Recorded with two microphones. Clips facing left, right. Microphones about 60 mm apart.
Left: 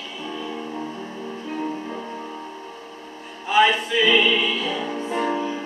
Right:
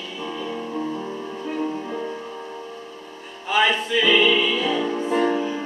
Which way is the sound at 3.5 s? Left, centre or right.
Centre.